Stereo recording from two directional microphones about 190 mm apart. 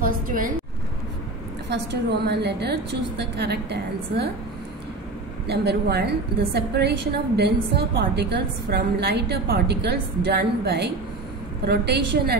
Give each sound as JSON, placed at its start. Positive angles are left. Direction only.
{"t": 0.0, "sound": "a sound", "side_deg": -45}
{"t": 1.7, "sound": "a woman's voice", "side_deg": -65}
{"t": 5.5, "sound": "a woman's voice", "side_deg": -60}